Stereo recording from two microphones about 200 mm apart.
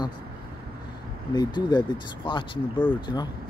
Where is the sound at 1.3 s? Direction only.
20° left (ahead or behind).